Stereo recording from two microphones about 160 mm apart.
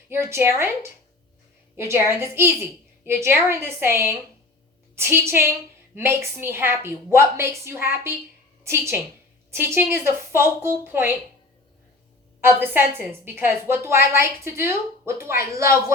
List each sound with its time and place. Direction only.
0.1 s a woman's voice: 15° right (ahead or behind)
12.4 s a woman's voice: 15° right (ahead or behind)